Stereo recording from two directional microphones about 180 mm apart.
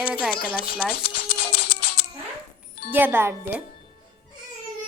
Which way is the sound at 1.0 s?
60° left (ahead or behind).